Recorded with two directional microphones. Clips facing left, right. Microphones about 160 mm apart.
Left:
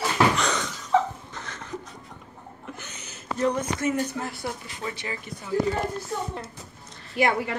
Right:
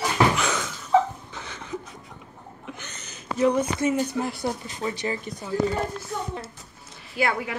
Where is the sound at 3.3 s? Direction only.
10° right (ahead or behind).